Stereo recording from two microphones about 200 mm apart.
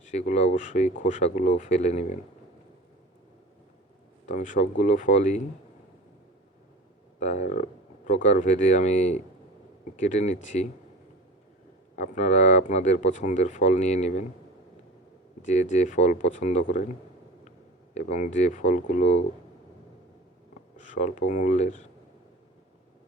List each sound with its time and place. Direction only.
0.0 s speech: 35° left (ahead or behind)
4.3 s speech: 35° left (ahead or behind)
7.2 s speech: 35° left (ahead or behind)
11.9 s speech: 35° left (ahead or behind)
15.4 s speech: 35° left (ahead or behind)
17.9 s speech: 35° left (ahead or behind)
20.7 s speech: 40° left (ahead or behind)